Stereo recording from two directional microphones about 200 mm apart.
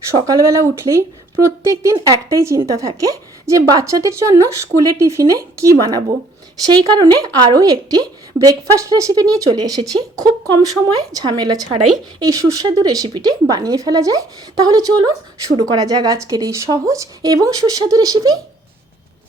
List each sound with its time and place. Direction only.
0.2 s speech: 15° right (ahead or behind)